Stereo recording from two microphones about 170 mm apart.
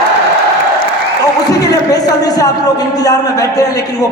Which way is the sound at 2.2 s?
20° left (ahead or behind).